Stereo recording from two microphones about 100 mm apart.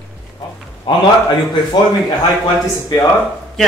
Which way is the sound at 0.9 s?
55° left (ahead or behind).